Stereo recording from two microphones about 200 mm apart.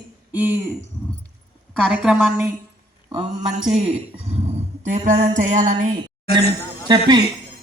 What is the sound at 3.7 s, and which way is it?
Speech, 30° right (ahead or behind).